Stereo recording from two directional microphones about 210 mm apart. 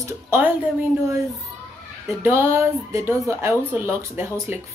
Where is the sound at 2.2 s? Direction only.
10° right (ahead or behind).